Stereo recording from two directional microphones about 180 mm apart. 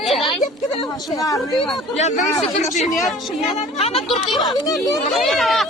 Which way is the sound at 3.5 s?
35° left (ahead or behind).